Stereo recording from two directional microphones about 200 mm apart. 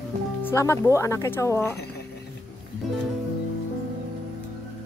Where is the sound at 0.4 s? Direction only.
10° left (ahead or behind).